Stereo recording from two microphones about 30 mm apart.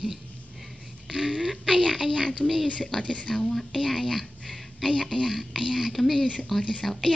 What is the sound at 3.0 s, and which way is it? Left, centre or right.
Speech, left.